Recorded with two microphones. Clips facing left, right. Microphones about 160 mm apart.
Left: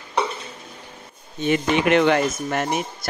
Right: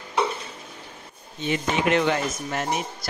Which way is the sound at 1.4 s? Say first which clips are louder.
Left 4 dB; 60° left (ahead or behind).